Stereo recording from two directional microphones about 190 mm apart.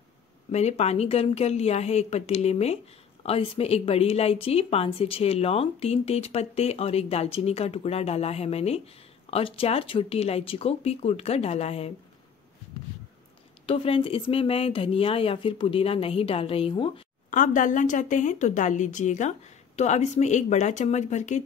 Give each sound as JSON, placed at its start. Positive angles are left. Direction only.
{"t": 0.5, "sound": "speech", "side_deg": 35}
{"t": 13.7, "sound": "speech", "side_deg": 30}
{"t": 17.3, "sound": "speech", "side_deg": 45}